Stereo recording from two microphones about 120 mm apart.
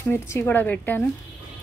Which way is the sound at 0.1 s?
20° left (ahead or behind).